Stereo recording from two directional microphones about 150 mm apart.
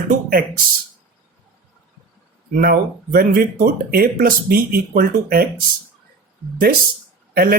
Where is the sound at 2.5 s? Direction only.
85° right.